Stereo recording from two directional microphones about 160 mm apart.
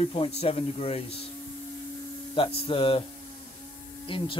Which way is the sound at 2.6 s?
35° left (ahead or behind).